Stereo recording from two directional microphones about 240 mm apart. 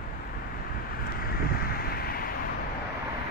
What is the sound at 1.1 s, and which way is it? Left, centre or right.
Vehicle, left.